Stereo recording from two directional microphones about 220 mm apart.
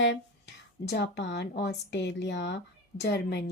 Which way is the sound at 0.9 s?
50° left (ahead or behind).